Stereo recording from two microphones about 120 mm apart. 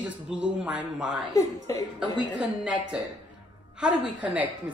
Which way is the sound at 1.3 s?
25° left (ahead or behind).